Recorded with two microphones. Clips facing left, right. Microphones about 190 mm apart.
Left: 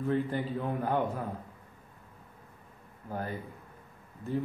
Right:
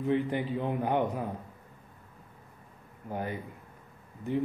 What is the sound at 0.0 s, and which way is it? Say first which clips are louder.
A man's voice: right 2 dB; 15° right (ahead or behind).